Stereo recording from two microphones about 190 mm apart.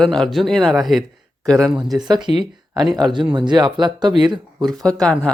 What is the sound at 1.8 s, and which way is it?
Speech, 20° right (ahead or behind).